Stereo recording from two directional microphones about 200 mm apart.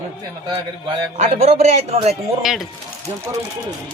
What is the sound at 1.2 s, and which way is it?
Speech, 35° right (ahead or behind).